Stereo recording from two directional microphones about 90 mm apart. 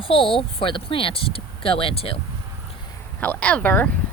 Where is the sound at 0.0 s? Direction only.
80° left.